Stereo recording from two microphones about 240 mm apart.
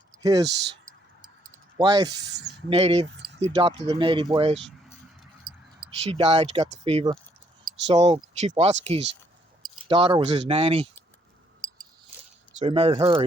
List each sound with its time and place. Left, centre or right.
0.2 s speech: centre
0.6 s clicking: right
1.8 s mechanisms: centre
2.3 s speech: right
2.6 s speech: right
5.9 s speech: right
12.5 s speech: right